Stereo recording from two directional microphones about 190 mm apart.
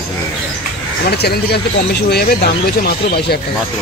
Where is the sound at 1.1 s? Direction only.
55° left (ahead or behind).